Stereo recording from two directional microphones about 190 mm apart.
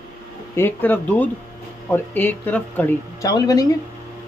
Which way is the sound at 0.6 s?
10° left (ahead or behind).